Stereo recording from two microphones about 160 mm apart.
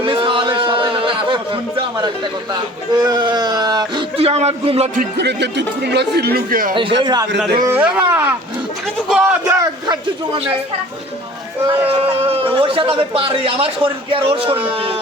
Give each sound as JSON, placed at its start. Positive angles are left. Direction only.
{"t": 0.0, "sound": "a sound", "side_deg": -35}
{"t": 3.0, "sound": "speech", "side_deg": -25}
{"t": 4.2, "sound": "a man's voice", "side_deg": -40}
{"t": 4.9, "sound": "speech", "side_deg": -90}
{"t": 7.0, "sound": "speech", "side_deg": -25}
{"t": 7.7, "sound": "a man's voice", "side_deg": -10}
{"t": 9.5, "sound": "a man's voice", "side_deg": -20}
{"t": 11.7, "sound": "a man's voice", "side_deg": -35}